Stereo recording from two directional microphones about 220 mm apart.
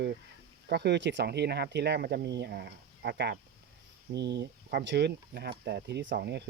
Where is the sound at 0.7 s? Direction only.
50° right (ahead or behind).